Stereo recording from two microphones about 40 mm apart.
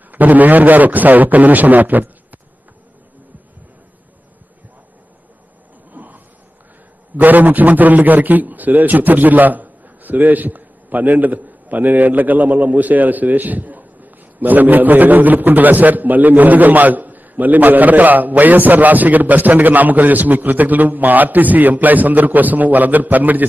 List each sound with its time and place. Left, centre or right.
0.1 s a man's voice: right
5.9 s a sound: right
7.2 s a man's voice: right